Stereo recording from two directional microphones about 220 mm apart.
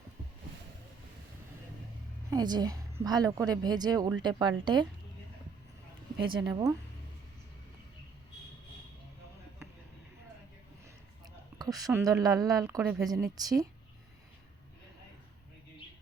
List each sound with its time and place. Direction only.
2.3 s a woman's voice: 20° right (ahead or behind)
6.2 s a woman's voice: 20° right (ahead or behind)
11.5 s a sound: 15° right (ahead or behind)
12.0 s a woman's voice: 15° right (ahead or behind)